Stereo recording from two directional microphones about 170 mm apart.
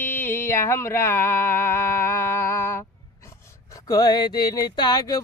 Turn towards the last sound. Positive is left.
turn(degrees=25)  # may be behind; listen again after turning